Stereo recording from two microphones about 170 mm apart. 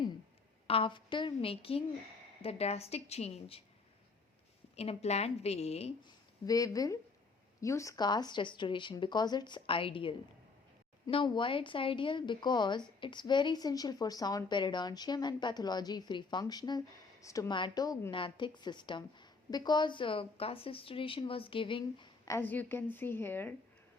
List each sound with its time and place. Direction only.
0.7 s a woman's voice: 30° left (ahead or behind)
4.8 s a woman's voice: 40° left (ahead or behind)
22.3 s a woman's voice: 10° left (ahead or behind)